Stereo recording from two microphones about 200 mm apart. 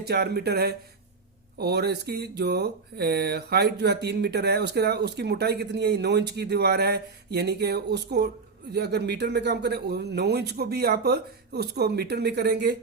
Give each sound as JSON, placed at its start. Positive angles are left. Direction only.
{"t": 0.0, "sound": "speech", "side_deg": -55}